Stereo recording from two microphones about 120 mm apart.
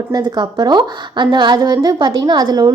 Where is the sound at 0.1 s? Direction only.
35° right (ahead or behind).